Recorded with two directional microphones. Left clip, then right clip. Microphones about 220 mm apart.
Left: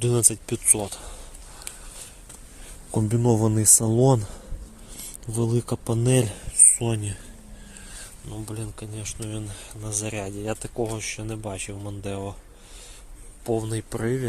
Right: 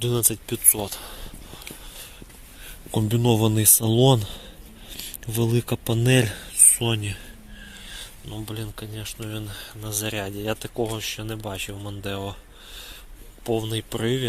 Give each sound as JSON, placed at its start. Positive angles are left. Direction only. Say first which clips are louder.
{"t": 0.0, "sound": "speech", "louder": "left 1 dB", "side_deg": 25}
{"t": 0.8, "sound": "speech", "louder": "right 1 dB", "side_deg": 10}
{"t": 2.9, "sound": "speech", "louder": "right 1 dB", "side_deg": 0}
{"t": 8.3, "sound": "speech", "louder": "right 1 dB", "side_deg": 0}
{"t": 13.4, "sound": "speech", "louder": "right 1 dB", "side_deg": 5}